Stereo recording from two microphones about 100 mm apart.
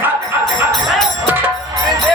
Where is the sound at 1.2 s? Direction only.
20° right (ahead or behind).